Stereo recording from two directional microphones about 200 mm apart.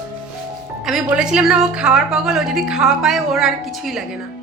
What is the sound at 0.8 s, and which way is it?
A woman's voice, 5° right (ahead or behind).